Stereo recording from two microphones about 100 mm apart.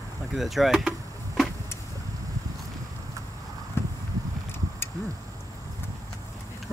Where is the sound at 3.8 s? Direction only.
25° left (ahead or behind).